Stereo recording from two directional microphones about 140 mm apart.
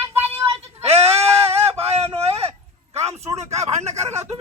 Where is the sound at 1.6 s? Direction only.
50° right (ahead or behind).